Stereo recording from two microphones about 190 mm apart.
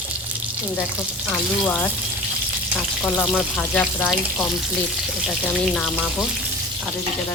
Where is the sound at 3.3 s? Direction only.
10° left (ahead or behind).